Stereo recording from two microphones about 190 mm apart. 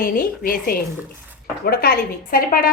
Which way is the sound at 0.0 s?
50° left (ahead or behind).